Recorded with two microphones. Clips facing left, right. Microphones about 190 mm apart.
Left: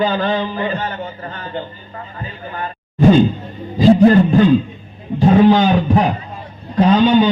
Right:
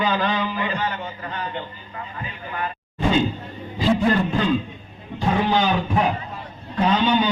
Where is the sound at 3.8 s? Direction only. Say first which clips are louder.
Left 10 dB; 40° left (ahead or behind).